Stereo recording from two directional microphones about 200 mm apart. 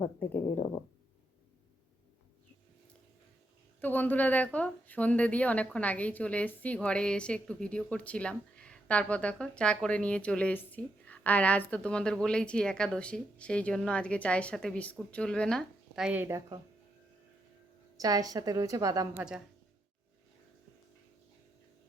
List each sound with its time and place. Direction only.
0.2 s speech: 10° left (ahead or behind)
3.8 s a woman's voice: 10° left (ahead or behind); by 16.6 s 15° right (ahead or behind)
18.0 s a woman's voice: 20° right (ahead or behind)